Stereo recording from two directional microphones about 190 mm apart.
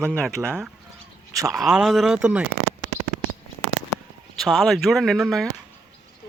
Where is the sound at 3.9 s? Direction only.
15° left (ahead or behind).